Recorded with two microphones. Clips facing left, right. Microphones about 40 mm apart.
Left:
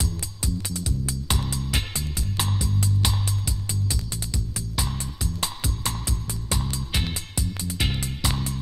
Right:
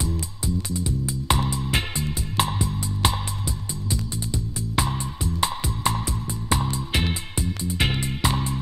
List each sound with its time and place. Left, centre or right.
0.8 s music: right